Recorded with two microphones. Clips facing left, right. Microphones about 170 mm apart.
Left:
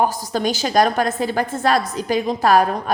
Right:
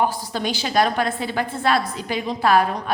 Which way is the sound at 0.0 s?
45° left (ahead or behind).